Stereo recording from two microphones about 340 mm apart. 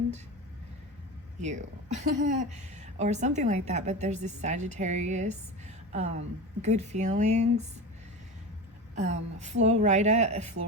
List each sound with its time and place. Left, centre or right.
1.4 s a woman's voice: right
9.4 s a woman's voice: centre